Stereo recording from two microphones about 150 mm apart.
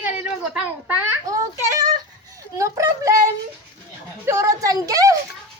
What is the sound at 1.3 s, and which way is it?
Speech, 20° right (ahead or behind).